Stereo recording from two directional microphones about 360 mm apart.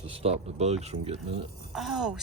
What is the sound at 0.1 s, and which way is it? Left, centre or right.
Speech, centre.